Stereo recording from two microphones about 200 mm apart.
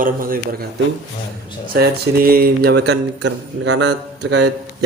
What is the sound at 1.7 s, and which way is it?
Speech, 50° right (ahead or behind).